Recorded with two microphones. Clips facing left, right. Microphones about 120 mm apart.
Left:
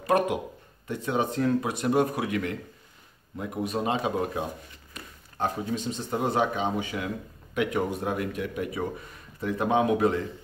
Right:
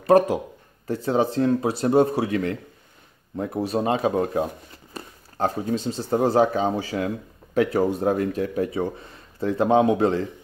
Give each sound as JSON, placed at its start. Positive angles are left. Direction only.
{"t": 0.0, "sound": "a man's voice", "side_deg": -35}